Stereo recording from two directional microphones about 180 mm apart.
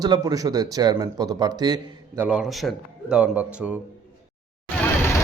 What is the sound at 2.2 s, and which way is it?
A man's voice, 5° right (ahead or behind).